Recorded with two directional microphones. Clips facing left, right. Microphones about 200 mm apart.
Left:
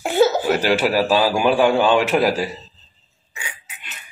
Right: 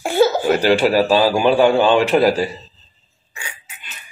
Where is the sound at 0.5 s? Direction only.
5° left (ahead or behind).